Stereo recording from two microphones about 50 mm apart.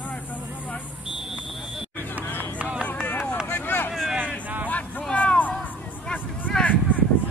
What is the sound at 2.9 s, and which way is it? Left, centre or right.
Run, left.